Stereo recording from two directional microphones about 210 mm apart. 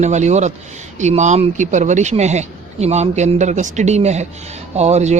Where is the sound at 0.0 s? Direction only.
35° right (ahead or behind).